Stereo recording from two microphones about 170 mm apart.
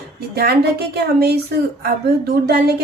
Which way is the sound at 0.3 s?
75° right (ahead or behind).